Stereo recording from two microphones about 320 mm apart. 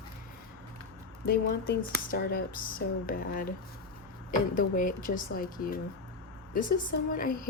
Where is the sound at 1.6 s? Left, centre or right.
Left.